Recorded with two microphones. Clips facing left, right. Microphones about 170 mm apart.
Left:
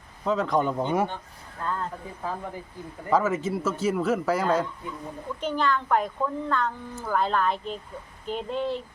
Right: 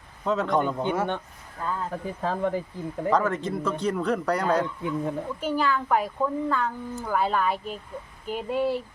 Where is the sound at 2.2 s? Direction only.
85° right.